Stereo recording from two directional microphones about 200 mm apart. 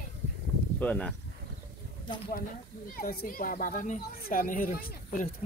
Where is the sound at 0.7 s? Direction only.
5° left (ahead or behind).